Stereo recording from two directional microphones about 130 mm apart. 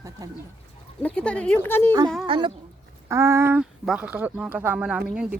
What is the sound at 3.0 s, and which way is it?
Speech, 20° right (ahead or behind).